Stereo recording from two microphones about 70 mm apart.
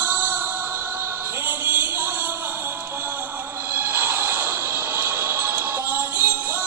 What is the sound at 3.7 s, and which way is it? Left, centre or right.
Music, right.